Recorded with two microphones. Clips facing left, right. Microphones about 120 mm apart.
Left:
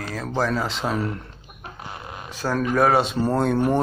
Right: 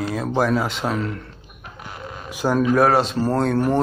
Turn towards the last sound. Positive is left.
turn(degrees=0)  # may be behind; listen again after turning